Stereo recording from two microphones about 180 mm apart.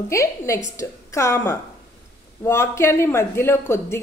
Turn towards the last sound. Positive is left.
turn(degrees=15)  # may be behind; listen again after turning